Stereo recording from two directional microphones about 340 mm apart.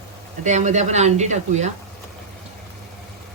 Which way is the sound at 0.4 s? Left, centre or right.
Right.